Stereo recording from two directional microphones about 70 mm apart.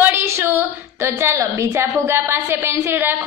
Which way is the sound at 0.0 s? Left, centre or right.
Right.